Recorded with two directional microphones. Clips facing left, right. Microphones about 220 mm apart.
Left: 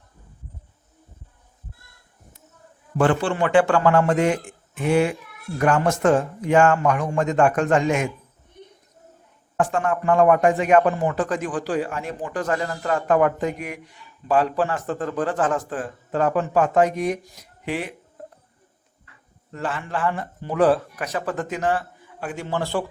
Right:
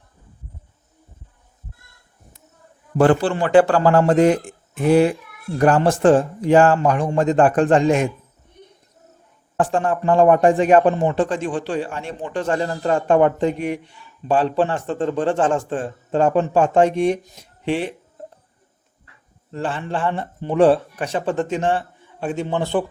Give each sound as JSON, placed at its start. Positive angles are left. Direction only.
{"t": 3.0, "sound": "speech", "side_deg": -35}
{"t": 9.6, "sound": "a man's voice", "side_deg": -30}
{"t": 19.5, "sound": "a man's voice", "side_deg": -30}